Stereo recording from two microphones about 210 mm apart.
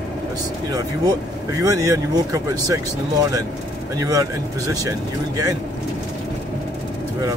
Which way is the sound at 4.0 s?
15° right (ahead or behind).